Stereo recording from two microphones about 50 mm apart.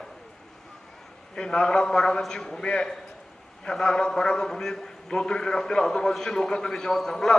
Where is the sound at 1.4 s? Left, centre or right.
Centre.